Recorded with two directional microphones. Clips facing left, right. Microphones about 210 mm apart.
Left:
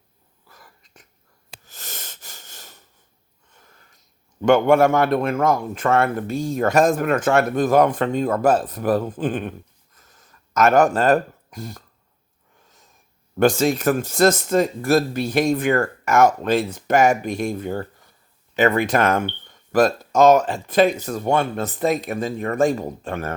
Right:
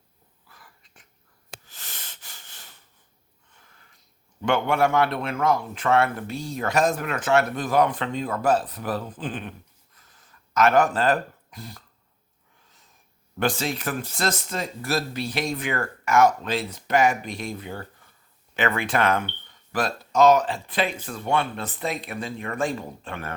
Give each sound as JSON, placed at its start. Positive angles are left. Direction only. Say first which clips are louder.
{"t": 0.4, "sound": "a sound", "louder": "left 4 dB", "side_deg": 40}
{"t": 1.6, "sound": "wheeze", "louder": "left 6 dB", "side_deg": 45}
{"t": 3.5, "sound": "a man's voice", "louder": "left 4 dB", "side_deg": 40}
{"t": 13.4, "sound": "speech", "louder": "left 9 dB", "side_deg": 45}